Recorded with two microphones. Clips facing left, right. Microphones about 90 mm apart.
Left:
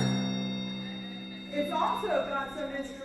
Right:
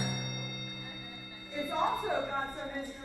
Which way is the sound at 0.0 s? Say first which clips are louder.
Left 8 dB; 30° left (ahead or behind).